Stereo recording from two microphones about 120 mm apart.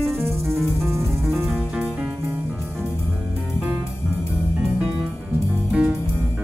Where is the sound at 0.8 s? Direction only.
25° right (ahead or behind).